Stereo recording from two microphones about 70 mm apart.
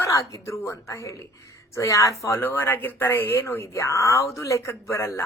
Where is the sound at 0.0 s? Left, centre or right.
Left.